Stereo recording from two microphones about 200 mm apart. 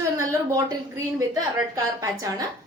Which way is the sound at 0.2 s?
15° right (ahead or behind).